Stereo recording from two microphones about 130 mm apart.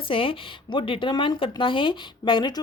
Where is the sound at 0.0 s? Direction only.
45° left (ahead or behind).